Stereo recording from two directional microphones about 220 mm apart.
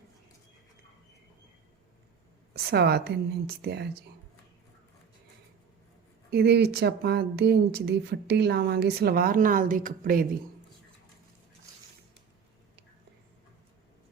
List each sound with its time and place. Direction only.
2.5 s a woman's voice: 45° right (ahead or behind)
6.3 s a woman's voice: 45° right (ahead or behind)